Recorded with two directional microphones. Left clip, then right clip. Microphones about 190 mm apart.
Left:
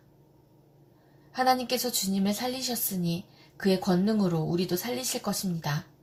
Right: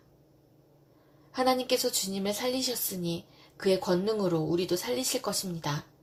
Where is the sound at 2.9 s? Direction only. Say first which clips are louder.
Even; 35° right (ahead or behind).